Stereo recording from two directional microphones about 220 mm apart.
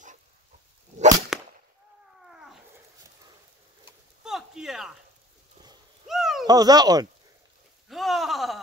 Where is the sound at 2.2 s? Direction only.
Centre (ahead or behind).